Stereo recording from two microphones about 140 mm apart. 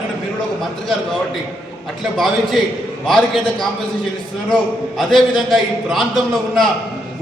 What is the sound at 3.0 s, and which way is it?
Speech, centre (ahead or behind).